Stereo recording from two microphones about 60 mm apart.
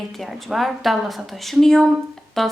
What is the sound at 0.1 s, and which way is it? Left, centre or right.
Speech, centre.